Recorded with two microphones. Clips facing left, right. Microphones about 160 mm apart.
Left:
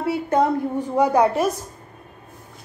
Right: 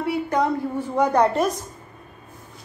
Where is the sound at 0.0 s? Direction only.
25° left (ahead or behind).